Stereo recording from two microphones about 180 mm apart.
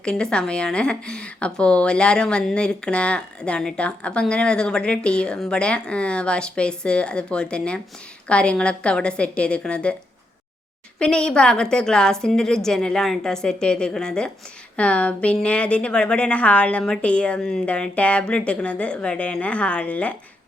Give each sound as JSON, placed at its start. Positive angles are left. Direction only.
{"t": 0.0, "sound": "a woman's voice", "side_deg": 5}
{"t": 11.0, "sound": "a woman's voice", "side_deg": 5}